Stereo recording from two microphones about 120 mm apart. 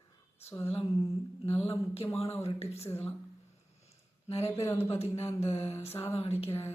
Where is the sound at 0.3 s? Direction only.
20° left (ahead or behind).